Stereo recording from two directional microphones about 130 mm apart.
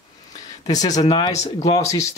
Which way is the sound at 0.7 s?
30° left (ahead or behind).